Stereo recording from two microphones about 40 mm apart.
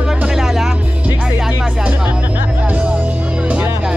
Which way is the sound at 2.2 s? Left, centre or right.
Right.